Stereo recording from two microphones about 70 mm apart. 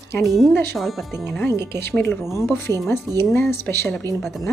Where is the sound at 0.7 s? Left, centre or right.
Centre.